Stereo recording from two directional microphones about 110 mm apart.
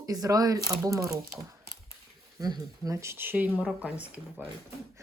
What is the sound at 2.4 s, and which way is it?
A woman's voice, 35° right (ahead or behind).